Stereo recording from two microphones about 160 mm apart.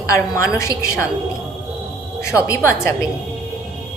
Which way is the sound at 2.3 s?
20° left (ahead or behind).